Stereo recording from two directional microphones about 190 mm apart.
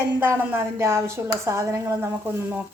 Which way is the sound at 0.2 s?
10° right (ahead or behind).